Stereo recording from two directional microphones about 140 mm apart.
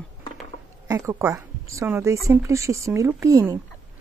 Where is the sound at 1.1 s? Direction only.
20° right (ahead or behind).